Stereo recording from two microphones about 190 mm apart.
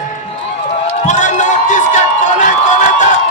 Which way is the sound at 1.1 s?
40° left (ahead or behind).